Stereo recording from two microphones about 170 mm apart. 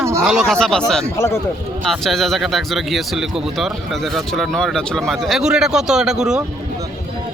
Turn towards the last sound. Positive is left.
turn(degrees=-5)  # may be behind; listen again after turning